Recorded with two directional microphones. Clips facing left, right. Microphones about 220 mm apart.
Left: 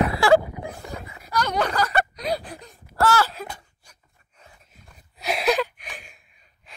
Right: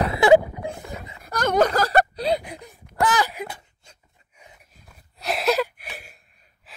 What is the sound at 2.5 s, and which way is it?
Wail, 15° right (ahead or behind).